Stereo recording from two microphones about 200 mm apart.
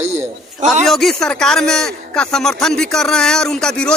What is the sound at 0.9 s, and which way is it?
Speech, centre (ahead or behind).